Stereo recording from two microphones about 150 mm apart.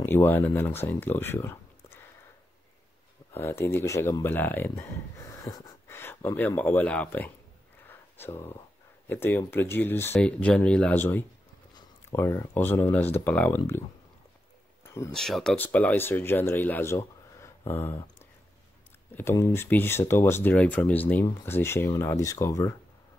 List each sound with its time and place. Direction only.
0.0 s speech: 15° left (ahead or behind)
3.3 s speech: 15° left (ahead or behind)
15.1 s speech: 5° left (ahead or behind)
19.1 s speech: 20° left (ahead or behind)